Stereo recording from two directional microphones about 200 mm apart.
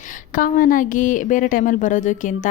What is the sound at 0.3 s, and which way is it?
Speech, 45° left (ahead or behind).